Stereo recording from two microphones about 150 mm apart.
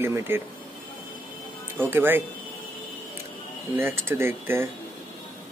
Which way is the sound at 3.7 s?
15° right (ahead or behind).